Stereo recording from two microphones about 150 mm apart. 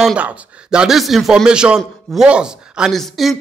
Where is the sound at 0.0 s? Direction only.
10° right (ahead or behind).